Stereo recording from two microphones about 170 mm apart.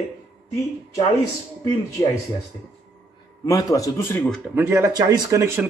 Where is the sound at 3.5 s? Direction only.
20° left (ahead or behind).